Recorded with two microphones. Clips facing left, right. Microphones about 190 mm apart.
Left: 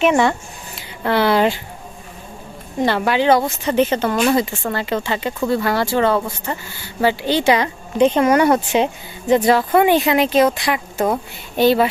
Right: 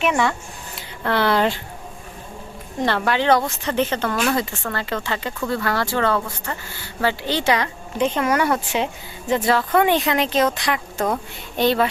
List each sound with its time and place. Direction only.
0.0 s speech: 25° left (ahead or behind)
1.0 s speech: 10° left (ahead or behind)
2.8 s speech: 10° left (ahead or behind)